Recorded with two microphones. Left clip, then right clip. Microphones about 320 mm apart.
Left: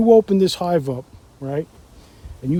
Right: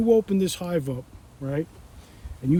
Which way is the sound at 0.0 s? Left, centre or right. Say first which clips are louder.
Left 8 dB; centre.